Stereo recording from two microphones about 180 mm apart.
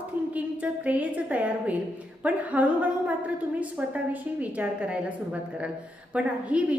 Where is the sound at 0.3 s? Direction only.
10° right (ahead or behind).